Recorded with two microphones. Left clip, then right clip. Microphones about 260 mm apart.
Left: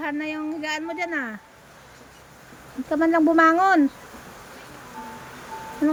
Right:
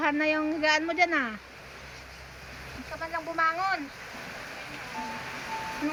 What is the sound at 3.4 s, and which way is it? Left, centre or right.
Speech, left.